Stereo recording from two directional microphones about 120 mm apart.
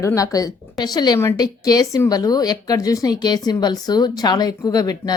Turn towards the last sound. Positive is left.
turn(degrees=30)  # may be behind; listen again after turning